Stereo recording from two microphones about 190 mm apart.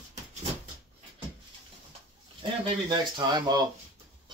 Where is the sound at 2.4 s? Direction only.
25° right (ahead or behind).